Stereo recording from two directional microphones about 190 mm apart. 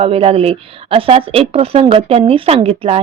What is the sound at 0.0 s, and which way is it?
Speech, 30° right (ahead or behind).